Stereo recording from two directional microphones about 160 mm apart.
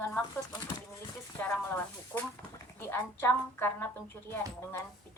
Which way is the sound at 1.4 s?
10° left (ahead or behind).